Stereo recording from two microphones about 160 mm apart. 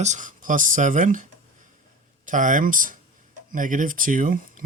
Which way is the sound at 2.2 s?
55° right (ahead or behind).